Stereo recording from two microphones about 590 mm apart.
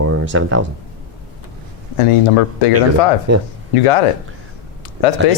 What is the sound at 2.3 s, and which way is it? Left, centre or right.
Speech, left.